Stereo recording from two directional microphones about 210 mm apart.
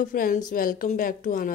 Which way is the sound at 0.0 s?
40° left (ahead or behind).